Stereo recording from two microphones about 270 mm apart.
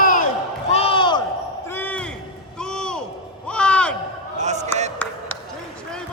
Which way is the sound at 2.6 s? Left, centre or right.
Centre.